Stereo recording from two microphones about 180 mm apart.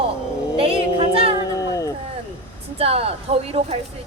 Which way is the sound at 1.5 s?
20° left (ahead or behind).